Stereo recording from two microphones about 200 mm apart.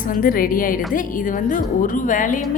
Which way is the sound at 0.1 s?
45° left (ahead or behind).